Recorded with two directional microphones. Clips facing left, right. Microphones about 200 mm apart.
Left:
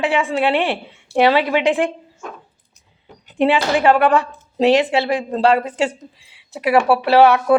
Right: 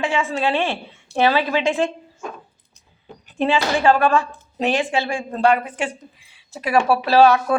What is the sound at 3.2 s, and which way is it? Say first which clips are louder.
A woman's voice: left 3 dB; 20° left (ahead or behind).